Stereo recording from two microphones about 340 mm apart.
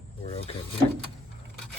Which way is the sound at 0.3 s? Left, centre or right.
Centre.